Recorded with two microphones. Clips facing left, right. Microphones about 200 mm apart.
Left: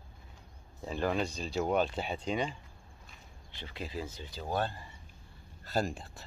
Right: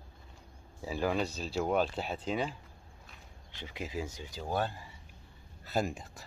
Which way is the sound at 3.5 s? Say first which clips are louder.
Right 1 dB; 15° right (ahead or behind).